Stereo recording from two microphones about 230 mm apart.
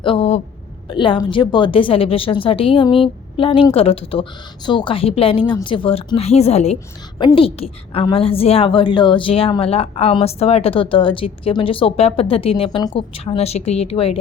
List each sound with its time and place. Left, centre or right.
0.0 s a woman's voice: left